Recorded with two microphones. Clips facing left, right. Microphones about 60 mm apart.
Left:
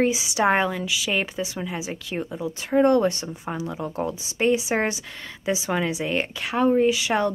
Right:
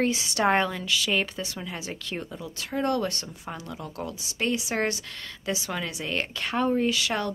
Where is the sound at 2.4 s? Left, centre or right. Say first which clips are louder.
Left 11 dB; left.